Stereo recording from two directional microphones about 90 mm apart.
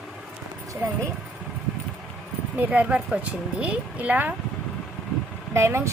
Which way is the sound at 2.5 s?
15° right (ahead or behind).